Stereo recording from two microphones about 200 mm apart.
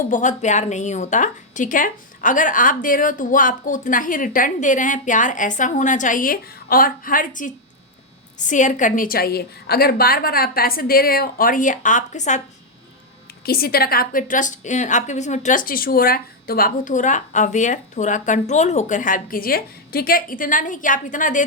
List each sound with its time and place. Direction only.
0.1 s a woman's voice: 40° left (ahead or behind)
13.4 s a woman's voice: 50° left (ahead or behind)